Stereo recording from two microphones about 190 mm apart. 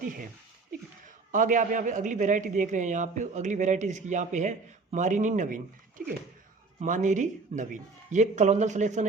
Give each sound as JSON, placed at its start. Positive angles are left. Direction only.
{"t": 1.3, "sound": "a man's voice", "side_deg": -45}